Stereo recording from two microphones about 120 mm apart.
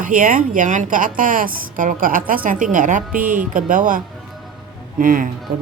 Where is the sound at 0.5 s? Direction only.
90° right.